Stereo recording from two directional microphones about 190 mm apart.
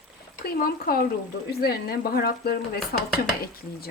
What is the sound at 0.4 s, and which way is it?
Speech, 55° left (ahead or behind).